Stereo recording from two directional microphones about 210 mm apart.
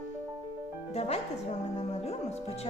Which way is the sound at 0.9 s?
30° left (ahead or behind).